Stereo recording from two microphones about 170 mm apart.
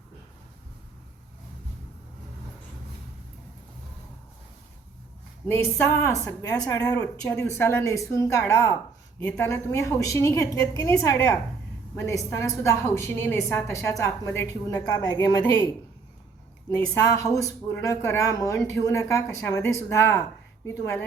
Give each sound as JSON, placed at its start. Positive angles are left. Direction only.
{"t": 5.5, "sound": "a woman's voice", "side_deg": 15}
{"t": 17.2, "sound": "a woman's voice", "side_deg": 20}